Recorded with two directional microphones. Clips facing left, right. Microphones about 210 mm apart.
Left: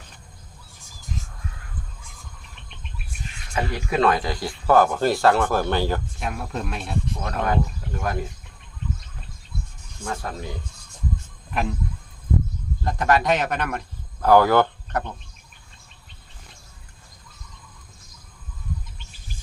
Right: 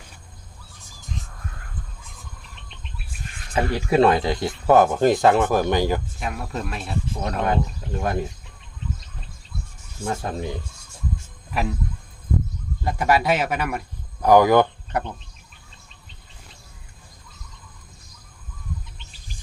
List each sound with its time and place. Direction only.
3.5 s speech: 30° right (ahead or behind)
6.1 s speech: centre (ahead or behind)
7.4 s speech: 25° right (ahead or behind)
10.0 s speech: 25° right (ahead or behind)
11.5 s speech: 5° right (ahead or behind)
12.8 s speech: 10° right (ahead or behind)